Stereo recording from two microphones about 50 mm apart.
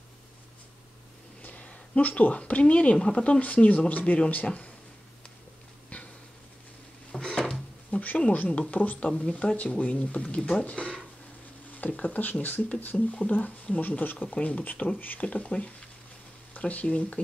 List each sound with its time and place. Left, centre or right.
1.4 s speech: left
7.1 s a sound: centre
7.9 s a sound: left
8.2 s speech: left
9.2 s speech: left
12.9 s speech: centre
13.3 s speech: left